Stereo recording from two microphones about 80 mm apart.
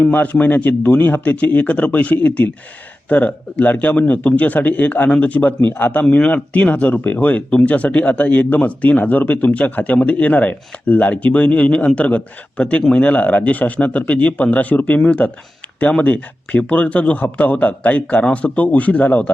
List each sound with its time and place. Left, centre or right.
0.0 s speech: centre